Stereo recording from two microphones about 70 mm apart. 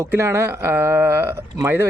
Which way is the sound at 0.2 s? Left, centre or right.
Right.